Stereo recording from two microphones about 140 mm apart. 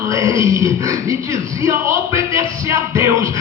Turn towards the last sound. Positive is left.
turn(degrees=-20)  # may be behind; listen again after turning